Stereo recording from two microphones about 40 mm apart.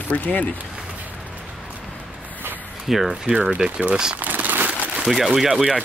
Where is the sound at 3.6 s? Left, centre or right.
Right.